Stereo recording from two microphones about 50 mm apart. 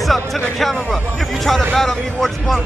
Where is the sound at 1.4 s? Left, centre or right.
Centre.